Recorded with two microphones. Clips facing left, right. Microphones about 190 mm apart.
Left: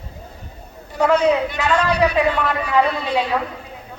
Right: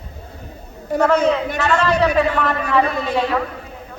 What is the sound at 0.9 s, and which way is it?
A man's voice, 45° right (ahead or behind).